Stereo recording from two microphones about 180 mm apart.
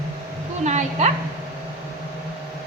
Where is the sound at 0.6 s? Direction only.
40° right (ahead or behind).